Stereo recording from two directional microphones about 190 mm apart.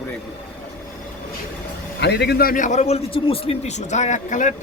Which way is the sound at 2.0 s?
60° left (ahead or behind).